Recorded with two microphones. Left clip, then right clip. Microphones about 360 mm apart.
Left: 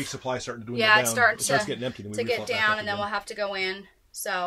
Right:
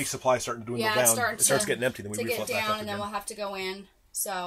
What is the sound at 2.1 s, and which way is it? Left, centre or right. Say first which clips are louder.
Speech: left 3 dB; left.